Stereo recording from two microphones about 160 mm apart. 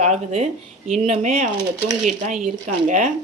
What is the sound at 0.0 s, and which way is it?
Speech, 40° right (ahead or behind).